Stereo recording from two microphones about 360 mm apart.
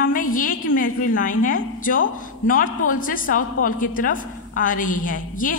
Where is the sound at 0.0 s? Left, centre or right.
Left.